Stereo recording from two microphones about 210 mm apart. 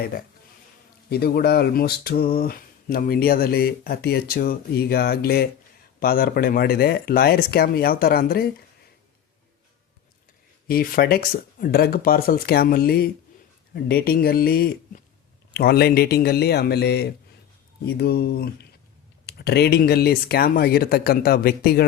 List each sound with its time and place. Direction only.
1.1 s speech: 50° left (ahead or behind)
10.7 s speech: 45° left (ahead or behind)